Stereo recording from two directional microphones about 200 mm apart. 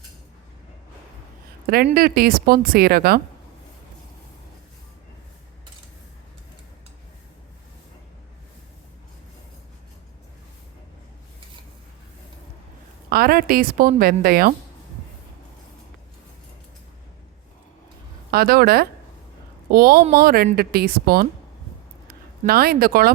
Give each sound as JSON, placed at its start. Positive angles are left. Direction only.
{"t": 1.6, "sound": "speech", "side_deg": -50}
{"t": 13.1, "sound": "speech", "side_deg": -50}
{"t": 18.3, "sound": "speech", "side_deg": -50}
{"t": 22.4, "sound": "speech", "side_deg": -50}